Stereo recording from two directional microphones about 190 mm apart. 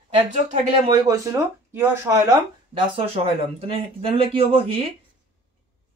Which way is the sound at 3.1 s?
30° right (ahead or behind).